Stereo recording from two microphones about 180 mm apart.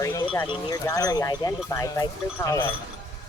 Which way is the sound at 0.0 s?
20° left (ahead or behind).